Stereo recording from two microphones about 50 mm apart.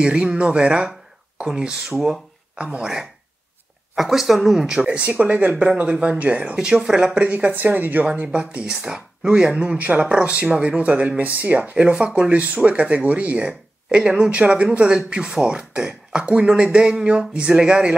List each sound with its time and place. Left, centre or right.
0.0 s speech: centre
2.8 s speech: centre
7.2 s speech: right
8.2 s speech: right
11.7 s speech: right
12.4 s speech: right